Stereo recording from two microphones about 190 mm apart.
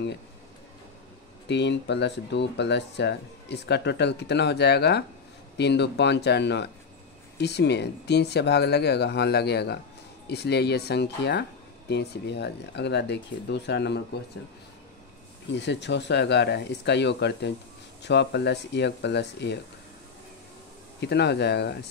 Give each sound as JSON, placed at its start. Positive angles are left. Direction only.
{"t": 1.5, "sound": "speech", "side_deg": 65}
{"t": 15.5, "sound": "speech", "side_deg": 65}
{"t": 21.0, "sound": "speech", "side_deg": 60}